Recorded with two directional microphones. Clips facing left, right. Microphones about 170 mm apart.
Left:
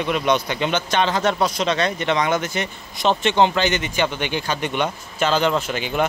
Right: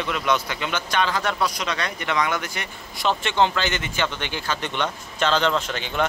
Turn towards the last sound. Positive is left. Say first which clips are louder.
# left 3 dB
turn(degrees=10)  # may be behind; listen again after turning